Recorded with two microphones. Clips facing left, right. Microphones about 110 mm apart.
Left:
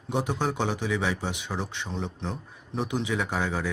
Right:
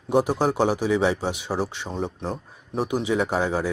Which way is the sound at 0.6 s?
15° right (ahead or behind).